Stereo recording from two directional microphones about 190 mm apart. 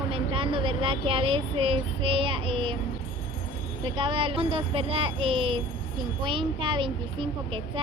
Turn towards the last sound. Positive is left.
turn(degrees=-25)  # may be behind; listen again after turning